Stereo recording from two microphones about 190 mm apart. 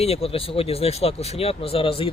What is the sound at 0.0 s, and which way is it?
Speech, 30° left (ahead or behind).